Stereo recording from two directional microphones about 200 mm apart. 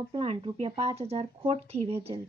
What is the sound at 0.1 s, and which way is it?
Speech, 30° right (ahead or behind).